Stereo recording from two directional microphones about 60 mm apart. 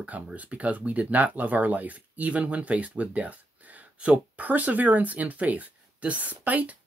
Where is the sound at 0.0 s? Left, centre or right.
Right.